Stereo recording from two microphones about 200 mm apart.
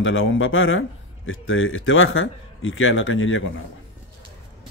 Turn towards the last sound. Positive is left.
turn(degrees=75)  # may be behind; listen again after turning